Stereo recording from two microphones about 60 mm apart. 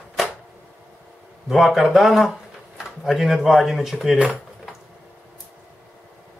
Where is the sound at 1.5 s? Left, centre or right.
Centre.